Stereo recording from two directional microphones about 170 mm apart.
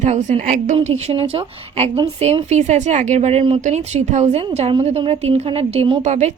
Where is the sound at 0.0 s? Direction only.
45° right (ahead or behind).